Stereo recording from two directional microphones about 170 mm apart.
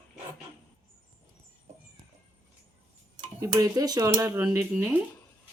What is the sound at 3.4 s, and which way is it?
Speech, 20° right (ahead or behind).